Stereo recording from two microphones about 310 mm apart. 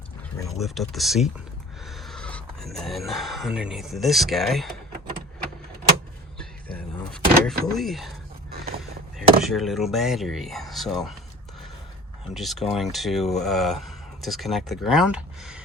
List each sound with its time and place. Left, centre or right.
0.5 s speech: centre
6.4 s power windows: centre
7.7 s speech: centre
8.4 s vehicle: right
9.1 s speech: centre
12.3 s speech: centre